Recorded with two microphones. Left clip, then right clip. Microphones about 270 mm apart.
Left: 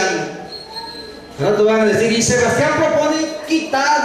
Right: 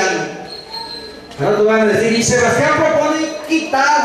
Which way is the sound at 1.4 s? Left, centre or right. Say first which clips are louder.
Right 1 dB; centre.